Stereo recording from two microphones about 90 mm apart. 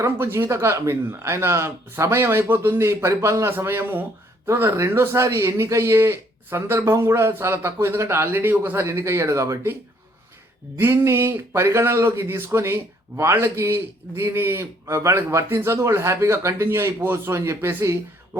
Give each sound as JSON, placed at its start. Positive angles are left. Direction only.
{"t": 0.0, "sound": "speech", "side_deg": -30}
{"t": 10.8, "sound": "speech", "side_deg": -30}